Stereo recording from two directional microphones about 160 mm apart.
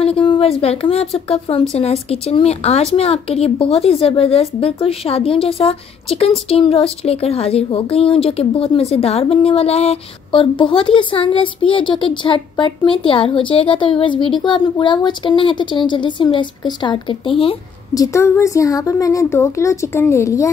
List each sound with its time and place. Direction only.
0.0 s speech: 35° left (ahead or behind); by 20.4 s 20° left (ahead or behind)